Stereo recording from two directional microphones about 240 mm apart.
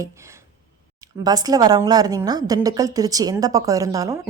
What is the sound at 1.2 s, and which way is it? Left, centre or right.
A woman's voice, centre.